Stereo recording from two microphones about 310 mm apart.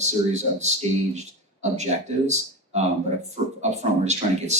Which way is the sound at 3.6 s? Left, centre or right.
Right.